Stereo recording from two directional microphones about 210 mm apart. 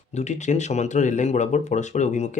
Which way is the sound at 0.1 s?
30° left (ahead or behind).